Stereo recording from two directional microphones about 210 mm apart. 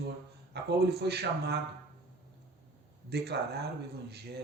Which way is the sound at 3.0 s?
50° right (ahead or behind).